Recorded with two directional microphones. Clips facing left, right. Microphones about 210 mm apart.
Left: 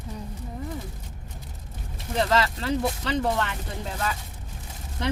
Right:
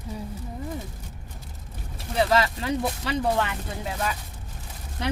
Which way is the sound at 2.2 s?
10° right (ahead or behind).